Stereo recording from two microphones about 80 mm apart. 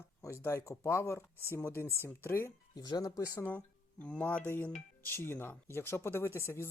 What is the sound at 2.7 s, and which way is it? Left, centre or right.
Speech, left.